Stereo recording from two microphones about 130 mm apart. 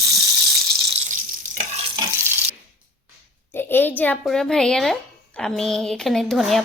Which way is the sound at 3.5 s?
15° left (ahead or behind).